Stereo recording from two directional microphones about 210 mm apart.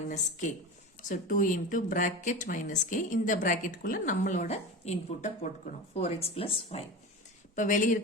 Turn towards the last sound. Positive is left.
turn(degrees=40)  # may be behind; listen again after turning